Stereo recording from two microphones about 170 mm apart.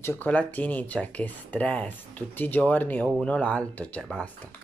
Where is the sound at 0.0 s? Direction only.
10° left (ahead or behind).